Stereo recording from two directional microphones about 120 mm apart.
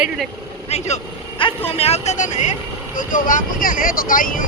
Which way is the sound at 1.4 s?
50° left (ahead or behind).